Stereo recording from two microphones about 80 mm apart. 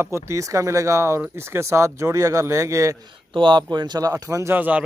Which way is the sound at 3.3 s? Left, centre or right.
Right.